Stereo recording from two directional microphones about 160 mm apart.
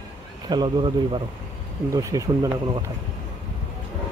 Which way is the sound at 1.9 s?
20° right (ahead or behind).